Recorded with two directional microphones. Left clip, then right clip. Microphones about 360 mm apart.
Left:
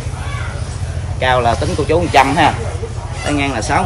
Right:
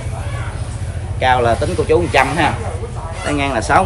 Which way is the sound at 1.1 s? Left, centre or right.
Centre.